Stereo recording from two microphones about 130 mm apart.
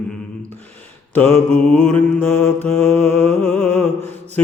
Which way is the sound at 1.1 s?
15° left (ahead or behind).